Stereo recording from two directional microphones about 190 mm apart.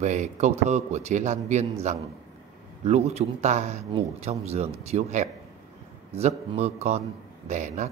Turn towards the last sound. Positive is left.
turn(degrees=-40)  # may be behind; listen again after turning